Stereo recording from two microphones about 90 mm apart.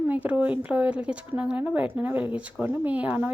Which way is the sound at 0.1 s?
15° right (ahead or behind).